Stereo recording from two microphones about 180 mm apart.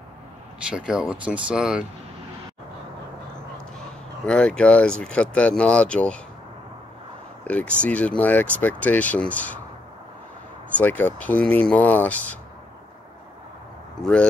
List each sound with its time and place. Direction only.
0.7 s speech: 5° right (ahead or behind)
4.3 s speech: 5° left (ahead or behind)
7.4 s speech: 5° left (ahead or behind)
10.8 s speech: 10° left (ahead or behind)